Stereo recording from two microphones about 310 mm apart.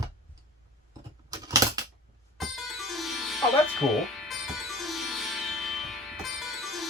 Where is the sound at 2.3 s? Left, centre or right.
Centre.